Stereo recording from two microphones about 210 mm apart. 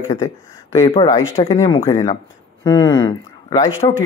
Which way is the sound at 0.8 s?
25° left (ahead or behind).